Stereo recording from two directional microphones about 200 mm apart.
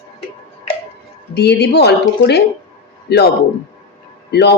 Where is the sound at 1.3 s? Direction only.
55° left (ahead or behind).